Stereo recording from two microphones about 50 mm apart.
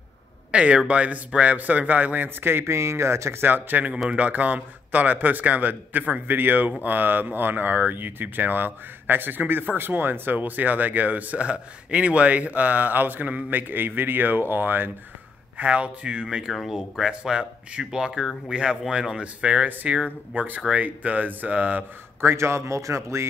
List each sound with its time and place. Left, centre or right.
0.5 s speech: right
2.2 s speech: right
2.6 s speech: right
3.4 s speech: right
15.5 s speech: right
16.5 s speech: centre
17.1 s speech: centre
22.2 s speech: right